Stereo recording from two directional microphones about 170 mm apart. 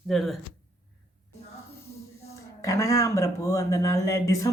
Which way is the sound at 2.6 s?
20° left (ahead or behind).